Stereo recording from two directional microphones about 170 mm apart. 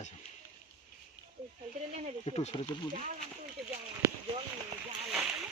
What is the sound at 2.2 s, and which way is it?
Speech, 35° left (ahead or behind).